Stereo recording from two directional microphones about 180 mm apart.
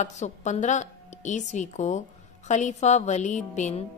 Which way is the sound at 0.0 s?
40° left (ahead or behind).